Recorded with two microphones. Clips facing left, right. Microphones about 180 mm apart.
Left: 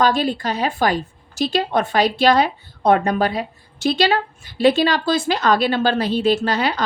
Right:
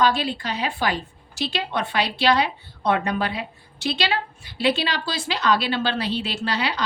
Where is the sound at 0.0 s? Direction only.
45° left (ahead or behind).